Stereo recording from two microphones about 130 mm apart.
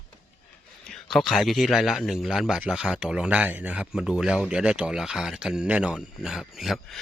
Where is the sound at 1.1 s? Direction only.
Centre (ahead or behind).